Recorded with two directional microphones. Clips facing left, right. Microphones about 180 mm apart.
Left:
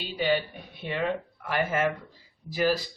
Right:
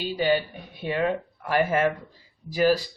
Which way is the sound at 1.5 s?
40° right (ahead or behind).